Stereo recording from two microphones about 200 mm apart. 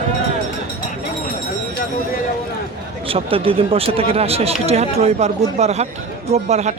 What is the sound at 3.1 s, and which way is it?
A man's voice, 25° right (ahead or behind).